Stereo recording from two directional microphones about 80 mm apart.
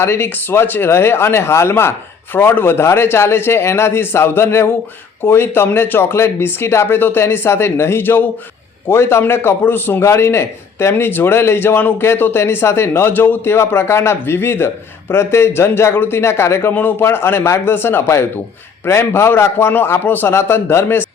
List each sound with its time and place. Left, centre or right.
0.0 s a man's voice: left